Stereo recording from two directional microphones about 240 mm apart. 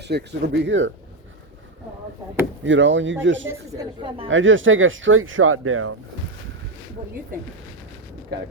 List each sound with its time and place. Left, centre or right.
0.1 s speech: right
2.6 s speech: right
3.8 s a woman's voice: centre
4.3 s speech: right